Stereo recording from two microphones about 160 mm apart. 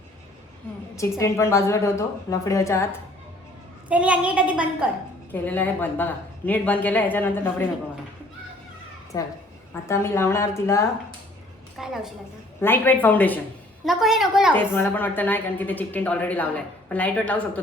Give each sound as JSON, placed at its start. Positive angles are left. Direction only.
{"t": 0.9, "sound": "a woman's voice", "side_deg": 20}
{"t": 3.8, "sound": "a woman's voice", "side_deg": -10}
{"t": 5.3, "sound": "a woman's voice", "side_deg": 10}
{"t": 9.1, "sound": "a woman's voice", "side_deg": 20}
{"t": 11.8, "sound": "a woman's voice", "side_deg": 0}
{"t": 12.6, "sound": "a woman's voice", "side_deg": 10}
{"t": 13.8, "sound": "a woman's voice", "side_deg": 0}
{"t": 14.5, "sound": "a woman's voice", "side_deg": 15}